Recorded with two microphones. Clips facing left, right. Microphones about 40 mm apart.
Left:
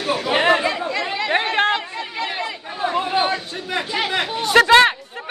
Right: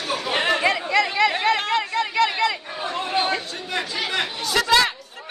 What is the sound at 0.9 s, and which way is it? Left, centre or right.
Chatter, right.